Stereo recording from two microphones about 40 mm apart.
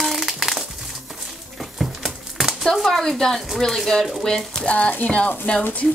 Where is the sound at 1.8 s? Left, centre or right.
Centre.